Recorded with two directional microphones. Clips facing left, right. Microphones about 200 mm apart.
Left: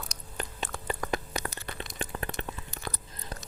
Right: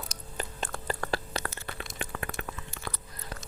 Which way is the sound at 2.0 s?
30° left (ahead or behind).